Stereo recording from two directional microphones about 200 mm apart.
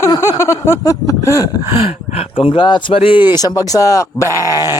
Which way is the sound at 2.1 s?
25° left (ahead or behind).